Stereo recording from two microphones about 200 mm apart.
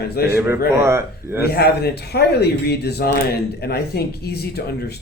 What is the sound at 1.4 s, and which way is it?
Speech, 55° left (ahead or behind).